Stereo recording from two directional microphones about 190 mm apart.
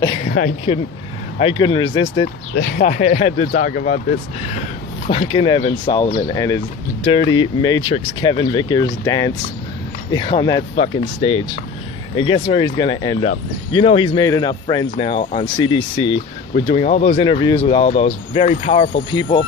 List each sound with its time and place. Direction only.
0.7 s speech: 35° left (ahead or behind)
2.8 s speech: 40° left (ahead or behind)
17.2 s speech: 25° left (ahead or behind)